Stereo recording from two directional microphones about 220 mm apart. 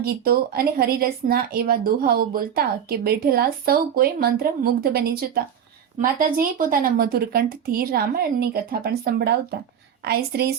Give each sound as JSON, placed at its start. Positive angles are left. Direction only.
{"t": 0.0, "sound": "speech", "side_deg": -45}